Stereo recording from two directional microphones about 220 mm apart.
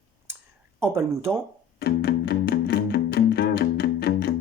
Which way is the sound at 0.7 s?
10° right (ahead or behind).